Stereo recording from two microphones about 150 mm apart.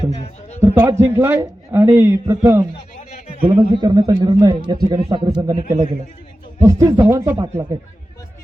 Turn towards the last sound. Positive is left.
turn(degrees=-20)  # may be behind; listen again after turning